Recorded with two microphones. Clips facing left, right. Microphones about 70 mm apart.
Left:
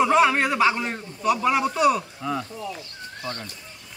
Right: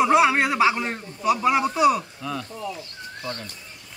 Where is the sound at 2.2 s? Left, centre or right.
Left.